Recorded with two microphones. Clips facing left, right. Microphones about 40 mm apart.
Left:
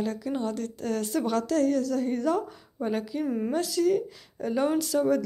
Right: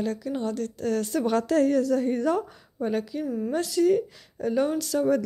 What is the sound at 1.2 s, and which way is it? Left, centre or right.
A woman's voice, centre.